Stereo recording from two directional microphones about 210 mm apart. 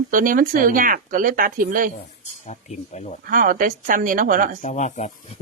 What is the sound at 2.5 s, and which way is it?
Speech, 35° left (ahead or behind).